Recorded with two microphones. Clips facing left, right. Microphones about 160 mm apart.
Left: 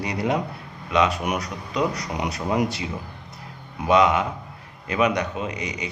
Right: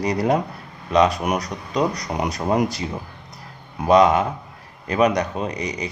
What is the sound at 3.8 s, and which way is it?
Speech, 35° right (ahead or behind).